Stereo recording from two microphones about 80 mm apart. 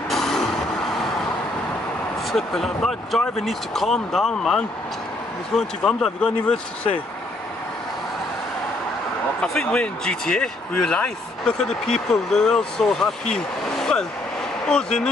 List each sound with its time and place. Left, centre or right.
0.1 s vehicle: centre
2.3 s speech: centre
9.4 s speech: centre